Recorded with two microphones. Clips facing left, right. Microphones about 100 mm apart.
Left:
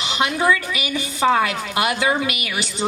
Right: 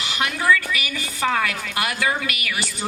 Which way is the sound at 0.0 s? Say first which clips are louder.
Left 4 dB; 20° left (ahead or behind).